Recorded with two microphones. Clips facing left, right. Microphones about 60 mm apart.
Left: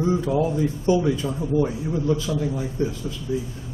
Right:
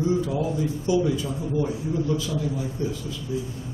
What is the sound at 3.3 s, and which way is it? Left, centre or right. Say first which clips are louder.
Speech: left 3 dB; left.